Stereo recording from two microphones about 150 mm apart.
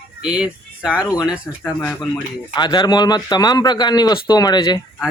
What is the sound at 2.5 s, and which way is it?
Speech, 30° left (ahead or behind).